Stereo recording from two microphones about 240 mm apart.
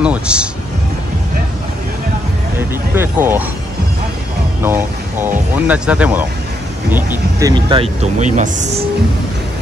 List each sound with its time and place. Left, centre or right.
0.0 s speech: centre
2.5 s speech: centre
4.6 s speech: centre; by 8.8 s right